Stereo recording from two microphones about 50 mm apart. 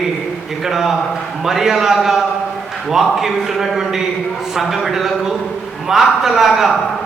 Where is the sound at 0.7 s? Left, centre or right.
Centre.